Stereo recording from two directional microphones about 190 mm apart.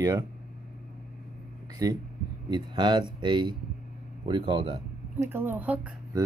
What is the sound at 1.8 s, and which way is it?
Speech, 20° right (ahead or behind).